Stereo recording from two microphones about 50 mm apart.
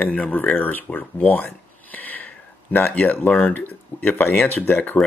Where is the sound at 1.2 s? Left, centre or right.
Left.